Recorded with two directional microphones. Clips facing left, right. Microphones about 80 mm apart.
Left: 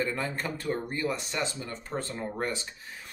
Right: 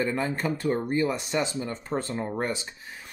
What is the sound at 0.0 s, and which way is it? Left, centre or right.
Speech, centre.